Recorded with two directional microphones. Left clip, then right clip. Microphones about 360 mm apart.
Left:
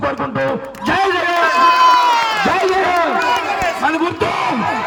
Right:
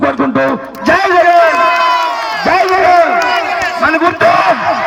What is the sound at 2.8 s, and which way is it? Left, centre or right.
Run, centre.